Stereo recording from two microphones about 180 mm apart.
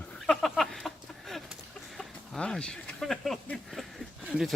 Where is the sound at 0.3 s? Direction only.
Centre (ahead or behind).